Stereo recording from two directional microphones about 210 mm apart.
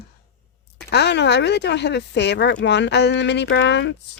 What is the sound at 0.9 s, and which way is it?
A woman's voice, 55° left (ahead or behind).